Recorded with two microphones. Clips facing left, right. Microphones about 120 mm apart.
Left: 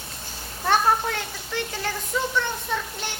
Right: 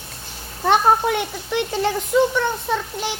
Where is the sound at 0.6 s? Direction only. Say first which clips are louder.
Right 5 dB; 20° right (ahead or behind).